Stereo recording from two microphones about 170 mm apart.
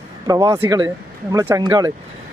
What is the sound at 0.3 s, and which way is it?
Speech, 20° right (ahead or behind).